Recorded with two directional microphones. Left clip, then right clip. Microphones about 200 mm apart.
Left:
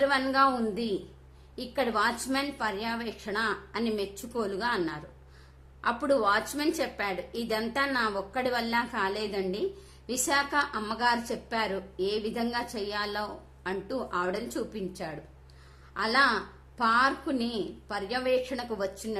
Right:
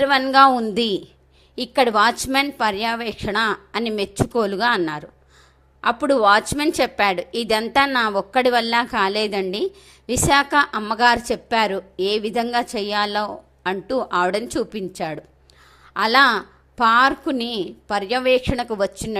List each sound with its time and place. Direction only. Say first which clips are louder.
0.0 s a woman's voice: right 10 dB; 35° right (ahead or behind)